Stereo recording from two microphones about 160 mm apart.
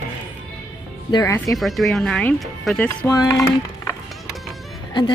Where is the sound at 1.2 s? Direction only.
15° left (ahead or behind).